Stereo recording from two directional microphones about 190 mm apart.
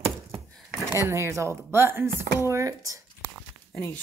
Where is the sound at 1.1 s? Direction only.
15° right (ahead or behind).